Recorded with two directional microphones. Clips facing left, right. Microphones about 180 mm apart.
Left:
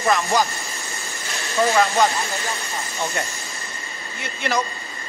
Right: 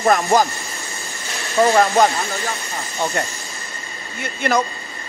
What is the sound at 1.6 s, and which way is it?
Speech, 55° right (ahead or behind).